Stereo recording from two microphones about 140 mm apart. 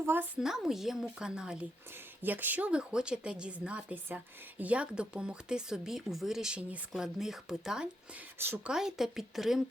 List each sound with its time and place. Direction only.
0.0 s a woman's voice: 15° right (ahead or behind)
0.3 s a woman's voice: 5° right (ahead or behind)
8.4 s speech: 15° right (ahead or behind)
8.7 s a woman's voice: 5° right (ahead or behind)